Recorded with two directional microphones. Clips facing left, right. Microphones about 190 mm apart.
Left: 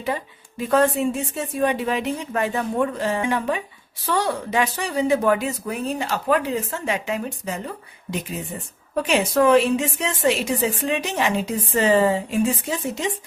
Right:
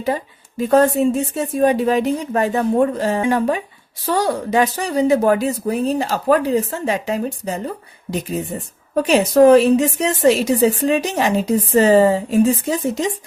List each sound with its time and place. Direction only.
0.0 s a woman's voice: 40° right (ahead or behind)